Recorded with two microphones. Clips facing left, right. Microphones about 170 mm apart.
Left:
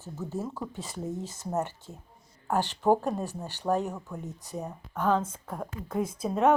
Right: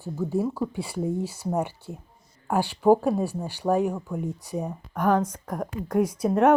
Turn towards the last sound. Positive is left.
turn(degrees=-10)  # may be behind; listen again after turning